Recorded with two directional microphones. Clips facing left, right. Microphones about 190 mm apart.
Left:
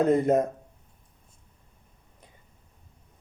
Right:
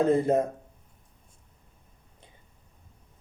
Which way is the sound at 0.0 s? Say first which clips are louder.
Left 1 dB; 30° right (ahead or behind).